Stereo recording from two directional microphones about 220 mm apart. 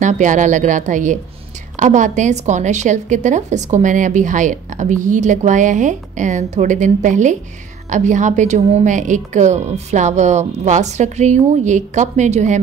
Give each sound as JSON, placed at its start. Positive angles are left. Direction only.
{"t": 0.0, "sound": "a woman's voice", "side_deg": -35}